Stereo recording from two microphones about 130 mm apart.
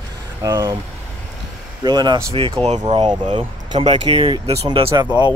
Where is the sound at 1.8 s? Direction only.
30° right (ahead or behind).